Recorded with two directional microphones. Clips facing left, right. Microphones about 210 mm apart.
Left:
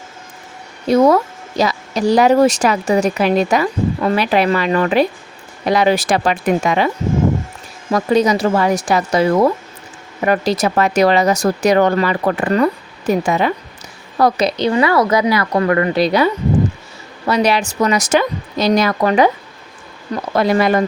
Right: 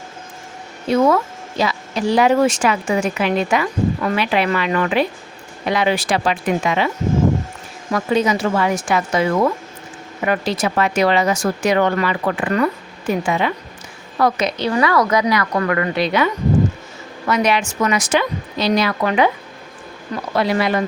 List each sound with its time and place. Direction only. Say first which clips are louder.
0.9 s a woman's voice: left 4 dB; 35° left (ahead or behind)
20.3 s speech: left 4 dB; 45° left (ahead or behind)